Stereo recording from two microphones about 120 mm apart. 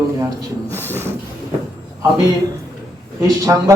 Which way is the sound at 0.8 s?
15° left (ahead or behind).